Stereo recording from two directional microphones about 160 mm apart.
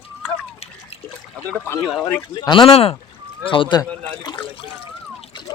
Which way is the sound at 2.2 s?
25° left (ahead or behind).